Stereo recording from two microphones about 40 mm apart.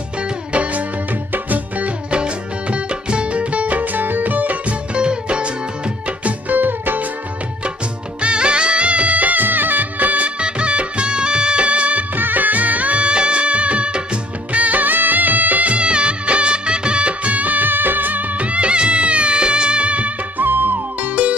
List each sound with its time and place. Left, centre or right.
0.5 s music: right
1.3 s music: right
2.0 s music: right
4.9 s music: right
6.5 s music: right
8.2 s music: right
12.2 s music: right
18.5 s music: right
20.3 s music: right